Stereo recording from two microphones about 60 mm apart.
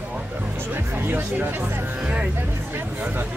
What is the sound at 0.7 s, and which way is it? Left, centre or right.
Speech, right.